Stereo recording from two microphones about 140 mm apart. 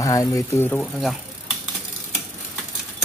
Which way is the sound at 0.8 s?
Centre (ahead or behind).